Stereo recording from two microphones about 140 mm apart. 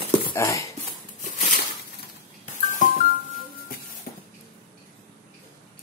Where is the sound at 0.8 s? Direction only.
65° left (ahead or behind).